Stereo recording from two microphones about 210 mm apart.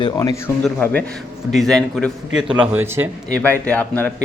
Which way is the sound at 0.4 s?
10° left (ahead or behind).